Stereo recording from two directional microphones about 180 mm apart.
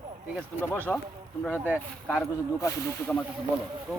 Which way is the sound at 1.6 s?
5° right (ahead or behind).